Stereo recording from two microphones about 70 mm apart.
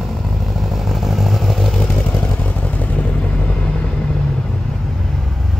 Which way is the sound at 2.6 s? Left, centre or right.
Left.